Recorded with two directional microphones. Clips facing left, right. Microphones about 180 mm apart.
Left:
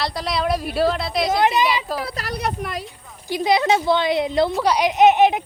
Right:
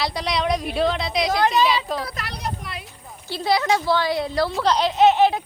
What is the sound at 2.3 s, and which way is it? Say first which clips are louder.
Speech: left 6 dB; 55° left (ahead or behind).